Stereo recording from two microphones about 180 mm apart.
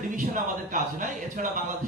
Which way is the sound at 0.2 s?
45° right (ahead or behind).